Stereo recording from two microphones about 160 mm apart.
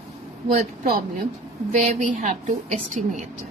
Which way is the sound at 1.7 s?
50° right (ahead or behind).